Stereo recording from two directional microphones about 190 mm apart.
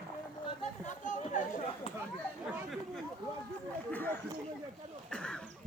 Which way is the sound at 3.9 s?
10° left (ahead or behind).